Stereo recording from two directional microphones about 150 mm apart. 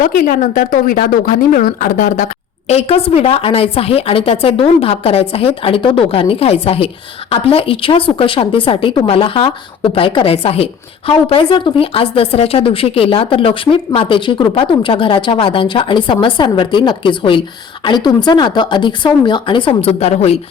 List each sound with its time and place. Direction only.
0.0 s speech: 65° left (ahead or behind)
2.6 s a woman's voice: 45° left (ahead or behind)